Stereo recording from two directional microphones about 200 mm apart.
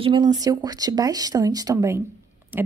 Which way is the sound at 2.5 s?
10° right (ahead or behind).